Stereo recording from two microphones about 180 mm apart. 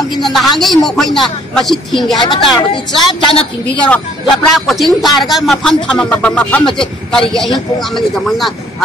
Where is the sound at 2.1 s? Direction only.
25° left (ahead or behind).